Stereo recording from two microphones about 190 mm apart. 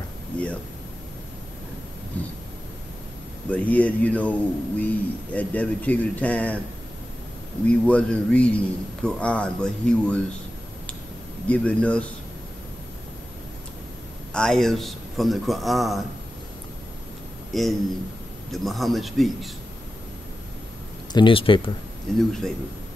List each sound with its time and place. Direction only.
0.3 s speech: 5° left (ahead or behind)
2.1 s thunder: 5° left (ahead or behind)
3.4 s speech: 5° left (ahead or behind)
7.8 s speech: 5° left (ahead or behind)
11.4 s speech: 5° left (ahead or behind)
14.3 s a man's voice: 5° left (ahead or behind)
17.5 s a man's voice: centre (ahead or behind)
21.1 s speech: 25° left (ahead or behind)
22.1 s a man's voice: centre (ahead or behind)